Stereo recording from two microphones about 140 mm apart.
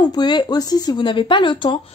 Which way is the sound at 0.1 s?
30° left (ahead or behind).